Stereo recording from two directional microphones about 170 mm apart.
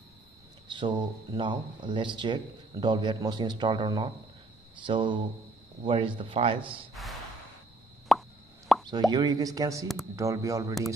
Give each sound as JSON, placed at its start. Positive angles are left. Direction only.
{"t": 0.7, "sound": "speech", "side_deg": -25}
{"t": 6.7, "sound": "speech", "side_deg": 0}
{"t": 8.1, "sound": "plop", "side_deg": 0}
{"t": 9.1, "sound": "speech", "side_deg": -25}